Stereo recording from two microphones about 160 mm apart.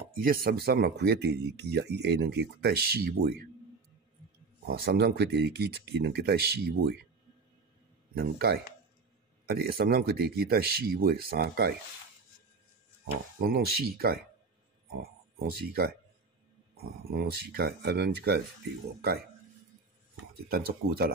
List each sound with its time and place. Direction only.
0.1 s speech: 65° right (ahead or behind)
4.6 s speech: 70° right (ahead or behind)
8.1 s speech: 75° right (ahead or behind)
13.1 s speech: 70° right (ahead or behind); by 18.4 s 85° right
20.4 s speech: 70° right (ahead or behind)